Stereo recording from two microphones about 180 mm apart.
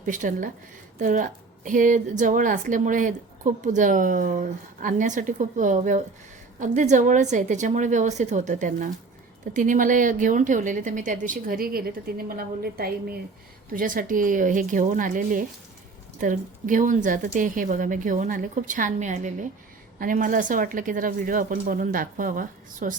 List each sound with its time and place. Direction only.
0.0 s speech: 45° right (ahead or behind)